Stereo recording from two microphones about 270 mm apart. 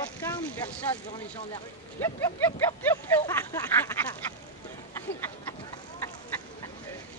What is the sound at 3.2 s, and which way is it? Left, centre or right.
Speech, centre.